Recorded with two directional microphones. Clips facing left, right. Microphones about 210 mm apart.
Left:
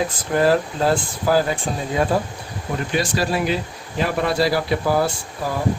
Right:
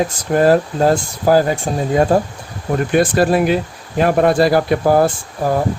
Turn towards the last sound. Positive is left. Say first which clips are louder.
# right 8 dB
turn(degrees=-50)  # may be behind; listen again after turning